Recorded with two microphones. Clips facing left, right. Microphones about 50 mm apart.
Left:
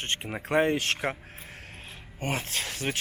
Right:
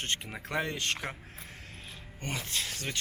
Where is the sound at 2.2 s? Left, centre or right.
Left.